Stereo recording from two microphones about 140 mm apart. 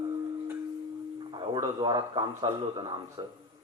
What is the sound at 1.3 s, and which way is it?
A man's voice, 35° right (ahead or behind).